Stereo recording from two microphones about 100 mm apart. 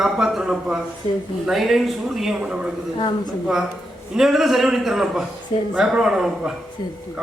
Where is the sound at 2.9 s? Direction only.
50° left (ahead or behind).